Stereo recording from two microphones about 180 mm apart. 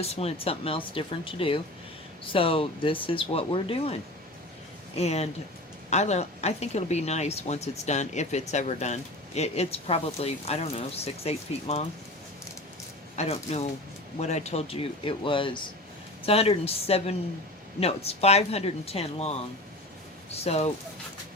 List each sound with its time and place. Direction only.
0.0 s speech: 35° left (ahead or behind)
4.9 s speech: 35° left (ahead or behind)
13.1 s speech: 35° left (ahead or behind)